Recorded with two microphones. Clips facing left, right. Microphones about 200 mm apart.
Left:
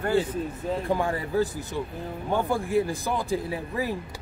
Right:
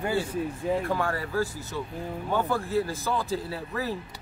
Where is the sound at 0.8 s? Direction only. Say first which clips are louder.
Left 2 dB; 20° left (ahead or behind).